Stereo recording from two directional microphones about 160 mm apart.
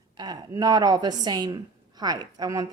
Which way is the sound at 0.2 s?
25° right (ahead or behind).